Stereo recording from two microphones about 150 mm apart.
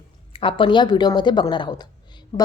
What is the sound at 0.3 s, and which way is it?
A woman's voice, 35° left (ahead or behind).